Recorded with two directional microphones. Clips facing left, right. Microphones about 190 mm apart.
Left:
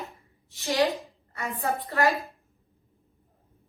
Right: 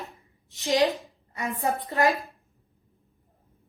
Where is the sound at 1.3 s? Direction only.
15° right (ahead or behind).